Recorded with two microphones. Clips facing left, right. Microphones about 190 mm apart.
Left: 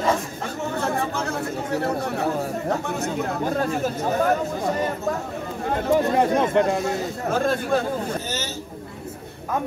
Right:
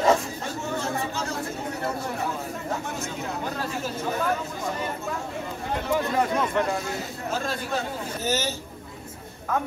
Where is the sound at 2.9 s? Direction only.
55° left (ahead or behind).